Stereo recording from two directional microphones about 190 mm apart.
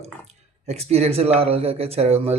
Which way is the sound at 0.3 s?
35° right (ahead or behind).